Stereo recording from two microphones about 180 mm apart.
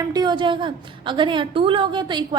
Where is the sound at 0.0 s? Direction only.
20° right (ahead or behind).